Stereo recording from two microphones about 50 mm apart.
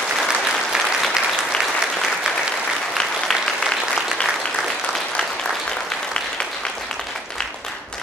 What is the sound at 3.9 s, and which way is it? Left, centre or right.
Applause, centre.